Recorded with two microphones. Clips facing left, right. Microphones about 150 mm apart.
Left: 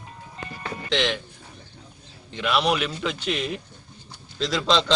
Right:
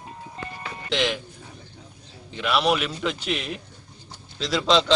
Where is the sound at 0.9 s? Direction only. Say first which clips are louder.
Even; 5° right (ahead or behind).